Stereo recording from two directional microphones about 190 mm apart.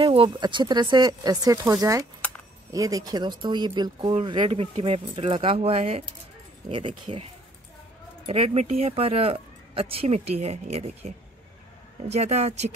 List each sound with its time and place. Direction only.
0.0 s speech: 25° right (ahead or behind)
8.3 s speech: 30° right (ahead or behind)